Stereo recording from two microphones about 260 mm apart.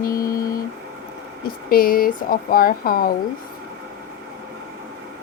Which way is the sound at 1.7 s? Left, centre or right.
Left.